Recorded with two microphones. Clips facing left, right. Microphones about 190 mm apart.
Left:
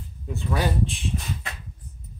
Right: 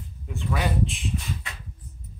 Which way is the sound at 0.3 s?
35° left (ahead or behind).